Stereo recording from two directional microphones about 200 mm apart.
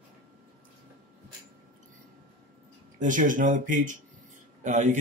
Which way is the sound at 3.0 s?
40° right (ahead or behind).